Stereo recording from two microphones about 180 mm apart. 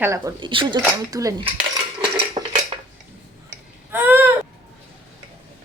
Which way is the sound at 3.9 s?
10° right (ahead or behind).